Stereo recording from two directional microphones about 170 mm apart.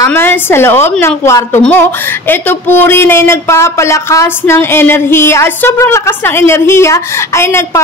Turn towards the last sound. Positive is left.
turn(degrees=15)  # may be behind; listen again after turning